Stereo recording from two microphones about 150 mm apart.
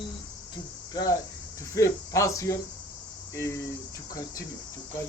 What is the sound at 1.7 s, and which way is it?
Speech, 20° left (ahead or behind).